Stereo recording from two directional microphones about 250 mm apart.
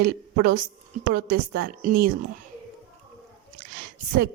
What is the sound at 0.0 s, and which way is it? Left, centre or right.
A woman's voice, right.